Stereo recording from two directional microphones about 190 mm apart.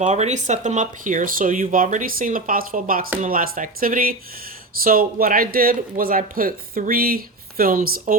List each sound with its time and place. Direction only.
0.0 s speech: 35° right (ahead or behind)